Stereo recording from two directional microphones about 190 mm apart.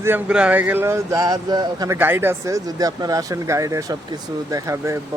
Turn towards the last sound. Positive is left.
turn(degrees=-15)  # may be behind; listen again after turning